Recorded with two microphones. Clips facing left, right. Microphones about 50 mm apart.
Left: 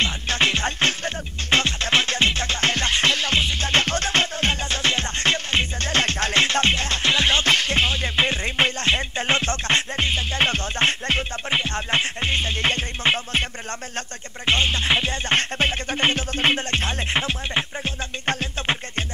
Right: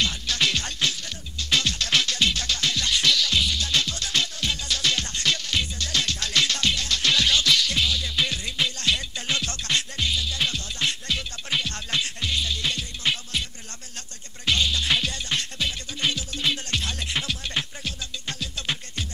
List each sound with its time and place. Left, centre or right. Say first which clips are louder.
0.0 s music: left 4 dB; left